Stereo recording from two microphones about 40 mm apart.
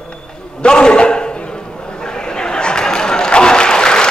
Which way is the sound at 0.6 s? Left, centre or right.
Left.